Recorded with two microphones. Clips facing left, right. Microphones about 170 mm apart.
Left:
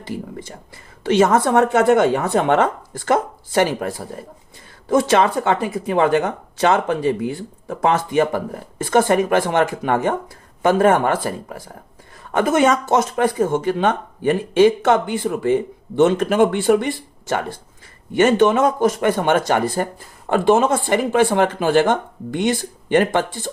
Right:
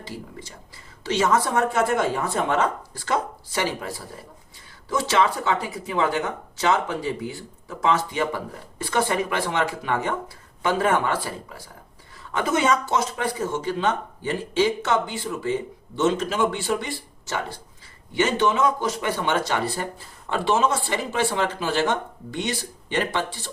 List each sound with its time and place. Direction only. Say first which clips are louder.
0.0 s speech: left 7 dB; 50° left (ahead or behind)